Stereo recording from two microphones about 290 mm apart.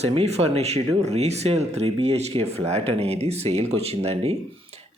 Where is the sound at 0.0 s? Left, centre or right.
Right.